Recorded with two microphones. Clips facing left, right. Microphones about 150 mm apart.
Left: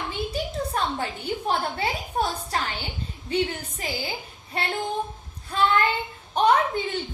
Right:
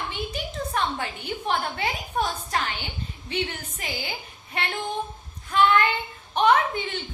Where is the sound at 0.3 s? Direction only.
35° left (ahead or behind).